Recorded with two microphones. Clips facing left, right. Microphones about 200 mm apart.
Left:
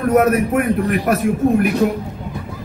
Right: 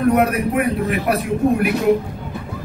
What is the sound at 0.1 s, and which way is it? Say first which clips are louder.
A man's voice: left 3 dB; 45° left (ahead or behind).